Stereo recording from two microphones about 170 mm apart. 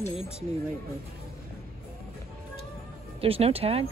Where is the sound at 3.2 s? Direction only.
35° right (ahead or behind).